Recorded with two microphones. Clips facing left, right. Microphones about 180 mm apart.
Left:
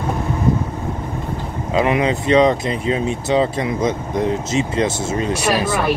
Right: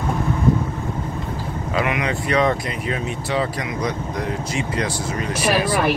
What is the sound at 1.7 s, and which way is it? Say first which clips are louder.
Speech: left 6 dB; 25° left (ahead or behind).